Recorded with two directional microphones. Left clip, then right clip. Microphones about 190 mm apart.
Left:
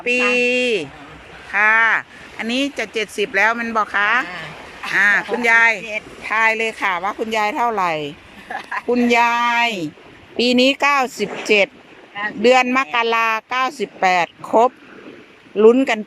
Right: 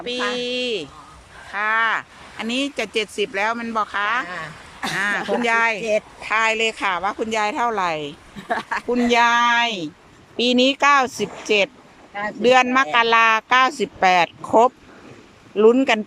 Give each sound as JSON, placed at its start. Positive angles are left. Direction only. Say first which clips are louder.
{"t": 0.0, "sound": "speech", "louder": "left 8 dB", "side_deg": 5}
{"t": 8.4, "sound": "speech", "louder": "right 2 dB", "side_deg": -60}
{"t": 8.9, "sound": "speech", "louder": "left 1 dB", "side_deg": 0}